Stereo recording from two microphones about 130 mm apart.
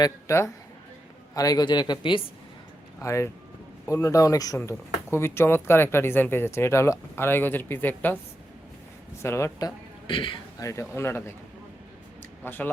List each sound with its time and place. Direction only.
0.0 s a woman's voice: 20° left (ahead or behind)
3.0 s speech: 25° left (ahead or behind)
9.2 s speech: 20° left (ahead or behind)
10.1 s a woman's voice: 40° left (ahead or behind)
10.6 s speech: 20° left (ahead or behind)
12.5 s speech: 15° left (ahead or behind)